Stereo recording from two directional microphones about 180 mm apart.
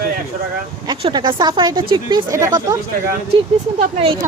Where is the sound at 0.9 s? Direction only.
25° right (ahead or behind).